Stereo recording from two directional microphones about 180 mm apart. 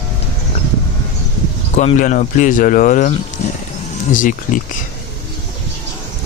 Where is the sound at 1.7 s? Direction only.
40° left (ahead or behind).